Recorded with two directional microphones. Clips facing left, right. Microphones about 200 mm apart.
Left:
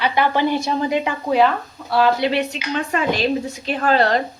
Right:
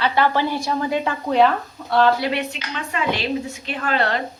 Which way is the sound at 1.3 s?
Centre (ahead or behind).